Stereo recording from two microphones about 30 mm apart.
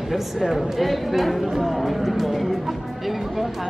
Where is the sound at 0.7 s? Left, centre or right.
Centre.